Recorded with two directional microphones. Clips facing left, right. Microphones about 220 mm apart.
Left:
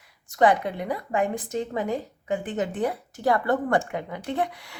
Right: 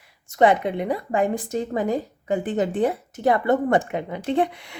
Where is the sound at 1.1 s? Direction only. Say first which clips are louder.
Right 2 dB; 35° right (ahead or behind).